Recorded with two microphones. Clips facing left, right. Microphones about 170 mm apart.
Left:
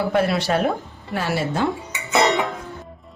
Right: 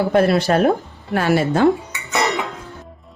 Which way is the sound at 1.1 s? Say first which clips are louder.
Right 6 dB; 55° right (ahead or behind).